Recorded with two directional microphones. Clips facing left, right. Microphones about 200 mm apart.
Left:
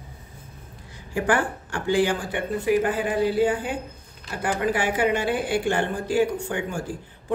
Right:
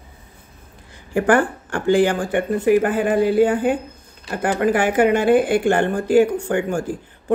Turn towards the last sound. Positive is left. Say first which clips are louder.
# right 7 dB
turn(degrees=-50)  # may be behind; listen again after turning